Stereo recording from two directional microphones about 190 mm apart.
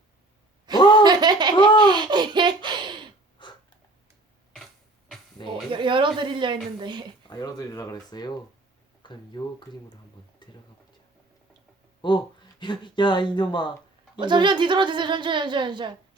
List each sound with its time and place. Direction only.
0.8 s a sound: 25° left (ahead or behind)
1.0 s a sound: 20° right (ahead or behind)
3.4 s snort: 25° left (ahead or behind)
5.4 s music: 25° left (ahead or behind)
5.7 s a sound: 25° right (ahead or behind)
6.7 s a woman's voice: 25° right (ahead or behind)
7.3 s speech: 20° left (ahead or behind)
12.0 s speech: 25° left (ahead or behind)
14.2 s a woman's voice: 25° right (ahead or behind)